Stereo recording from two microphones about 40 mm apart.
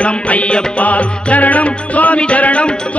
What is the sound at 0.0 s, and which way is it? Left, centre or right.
Music, left.